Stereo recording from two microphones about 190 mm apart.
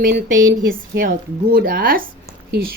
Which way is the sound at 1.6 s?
50° right (ahead or behind).